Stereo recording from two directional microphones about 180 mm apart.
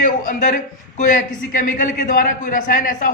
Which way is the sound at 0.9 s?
45° left (ahead or behind).